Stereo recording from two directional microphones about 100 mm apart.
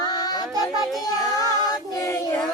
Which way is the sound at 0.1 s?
40° left (ahead or behind).